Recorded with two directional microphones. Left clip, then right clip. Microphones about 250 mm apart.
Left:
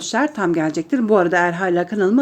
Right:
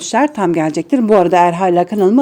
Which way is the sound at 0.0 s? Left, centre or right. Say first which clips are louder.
Right 5 dB; right.